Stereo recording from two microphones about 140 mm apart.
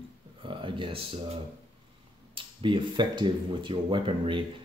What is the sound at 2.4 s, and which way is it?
Speech, 35° right (ahead or behind).